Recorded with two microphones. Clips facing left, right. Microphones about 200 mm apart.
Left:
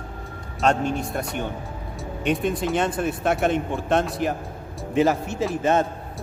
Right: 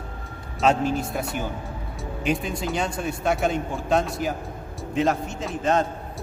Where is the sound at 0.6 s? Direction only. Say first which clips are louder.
Right 1 dB; centre (ahead or behind).